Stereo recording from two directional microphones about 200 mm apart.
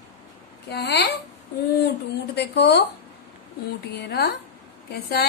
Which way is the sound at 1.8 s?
55° left (ahead or behind).